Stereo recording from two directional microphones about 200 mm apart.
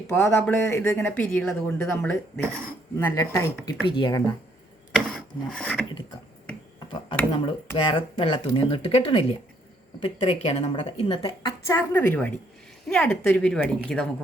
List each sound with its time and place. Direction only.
0.2 s speech: 10° left (ahead or behind)
4.9 s filing: centre (ahead or behind)
6.7 s speech: 25° left (ahead or behind)
11.6 s a woman's voice: 10° left (ahead or behind)